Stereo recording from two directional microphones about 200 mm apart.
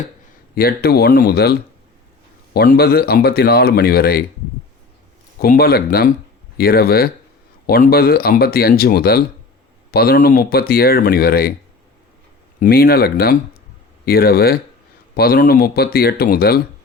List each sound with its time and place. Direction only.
0.5 s speech: 50° left (ahead or behind)
5.4 s speech: 50° left (ahead or behind)
12.5 s speech: 45° left (ahead or behind)